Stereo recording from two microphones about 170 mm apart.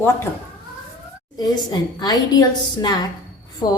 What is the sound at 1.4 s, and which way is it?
A woman's voice, 25° left (ahead or behind).